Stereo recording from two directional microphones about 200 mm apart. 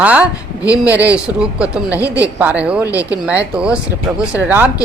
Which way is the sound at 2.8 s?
15° left (ahead or behind).